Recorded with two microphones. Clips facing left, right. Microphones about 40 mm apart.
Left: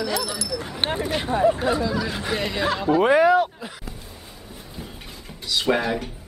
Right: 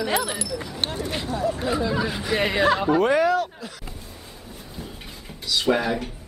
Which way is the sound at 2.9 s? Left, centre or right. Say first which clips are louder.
Left 3 dB; centre.